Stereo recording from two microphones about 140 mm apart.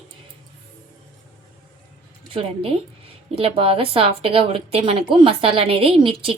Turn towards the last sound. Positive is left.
turn(degrees=-40)  # may be behind; listen again after turning